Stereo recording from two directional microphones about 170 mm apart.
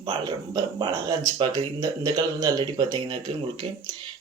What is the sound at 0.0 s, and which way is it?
Speech, 25° right (ahead or behind).